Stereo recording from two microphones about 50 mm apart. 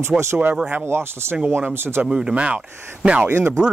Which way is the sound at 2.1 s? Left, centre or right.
Centre.